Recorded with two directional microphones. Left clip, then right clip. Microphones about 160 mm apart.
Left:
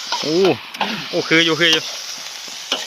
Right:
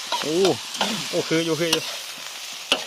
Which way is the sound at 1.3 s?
5° left (ahead or behind).